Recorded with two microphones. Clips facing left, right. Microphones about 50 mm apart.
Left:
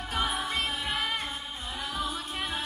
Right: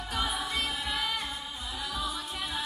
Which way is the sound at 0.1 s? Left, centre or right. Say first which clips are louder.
Left 2 dB; left.